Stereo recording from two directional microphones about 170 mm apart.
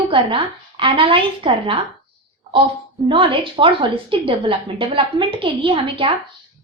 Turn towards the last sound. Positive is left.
turn(degrees=-30)  # may be behind; listen again after turning